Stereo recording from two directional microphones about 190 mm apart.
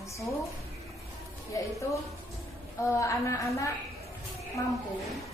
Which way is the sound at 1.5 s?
15° left (ahead or behind).